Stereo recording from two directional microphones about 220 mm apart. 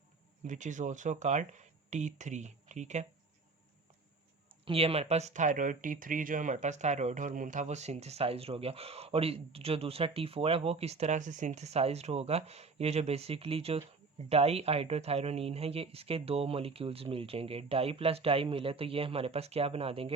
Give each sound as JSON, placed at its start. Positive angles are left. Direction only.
{"t": 0.4, "sound": "speech", "side_deg": -35}
{"t": 4.6, "sound": "speech", "side_deg": -25}